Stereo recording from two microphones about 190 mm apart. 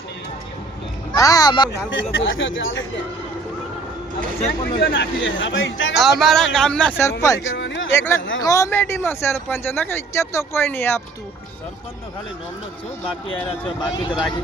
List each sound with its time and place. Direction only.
1.1 s speech: 20° left (ahead or behind)
1.9 s speech: 85° left
4.8 s speech: 65° left (ahead or behind); by 5.9 s 85° left
5.9 s speech: centre (ahead or behind); by 7.4 s 15° left (ahead or behind)
7.5 s a sound: 75° left (ahead or behind)
7.9 s speech: 15° left (ahead or behind)
13.2 s speech: 25° left (ahead or behind)